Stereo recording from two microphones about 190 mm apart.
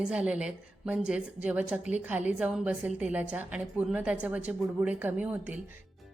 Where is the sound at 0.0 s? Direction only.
5° right (ahead or behind).